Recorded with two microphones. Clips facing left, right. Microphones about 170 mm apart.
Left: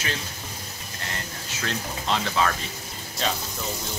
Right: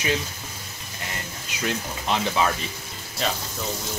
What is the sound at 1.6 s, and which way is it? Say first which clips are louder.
Speech: right 3 dB; 15° right (ahead or behind).